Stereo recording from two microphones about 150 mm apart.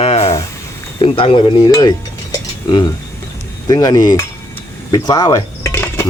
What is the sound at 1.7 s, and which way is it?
Speech, 25° left (ahead or behind).